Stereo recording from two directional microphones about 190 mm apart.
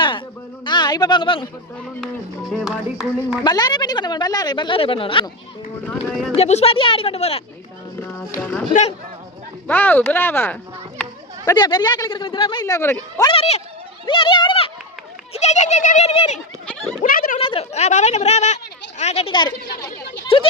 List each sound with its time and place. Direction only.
0.6 s speech: 25° left (ahead or behind)
2.5 s a sound: centre (ahead or behind)
3.4 s a woman's voice: 20° left (ahead or behind)
6.1 s a sound: centre (ahead or behind)
6.3 s speech: 35° left (ahead or behind)
8.4 s a child's voice: 10° left (ahead or behind)
9.6 s a child's voice: 10° left (ahead or behind)
11.4 s a woman's voice: 25° left (ahead or behind)
13.3 s speech: 35° left (ahead or behind)
17.0 s speech: 45° left (ahead or behind)
17.4 s a woman's voice: 30° left (ahead or behind)